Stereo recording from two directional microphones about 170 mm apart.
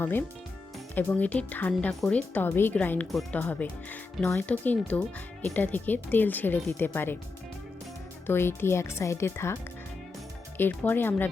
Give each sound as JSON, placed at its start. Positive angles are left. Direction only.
{"t": 0.0, "sound": "speech", "side_deg": 10}
{"t": 3.4, "sound": "speech", "side_deg": 10}
{"t": 8.3, "sound": "speech", "side_deg": 15}
{"t": 10.6, "sound": "speech", "side_deg": 10}